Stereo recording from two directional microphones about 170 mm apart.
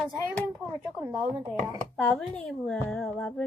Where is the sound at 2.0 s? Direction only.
5° left (ahead or behind).